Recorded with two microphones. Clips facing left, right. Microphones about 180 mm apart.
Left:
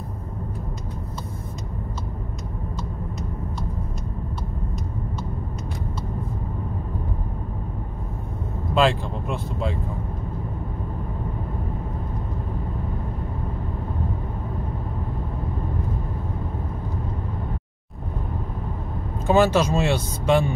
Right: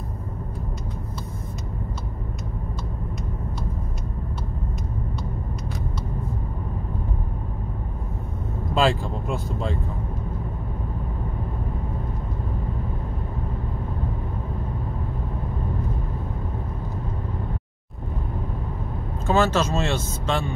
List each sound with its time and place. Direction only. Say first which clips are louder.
8.7 s speech: left 1 dB; centre (ahead or behind)
19.2 s speech: left 3 dB; 15° left (ahead or behind)